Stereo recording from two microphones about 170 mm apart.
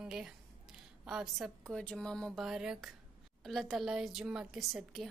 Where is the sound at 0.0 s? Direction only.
5° right (ahead or behind).